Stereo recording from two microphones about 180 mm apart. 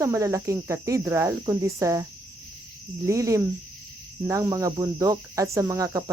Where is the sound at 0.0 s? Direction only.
15° right (ahead or behind).